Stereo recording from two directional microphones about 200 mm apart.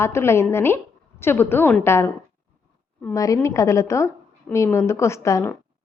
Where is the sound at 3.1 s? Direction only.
15° left (ahead or behind).